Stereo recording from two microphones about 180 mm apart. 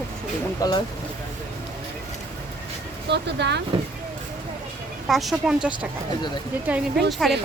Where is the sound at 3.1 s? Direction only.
70° right (ahead or behind).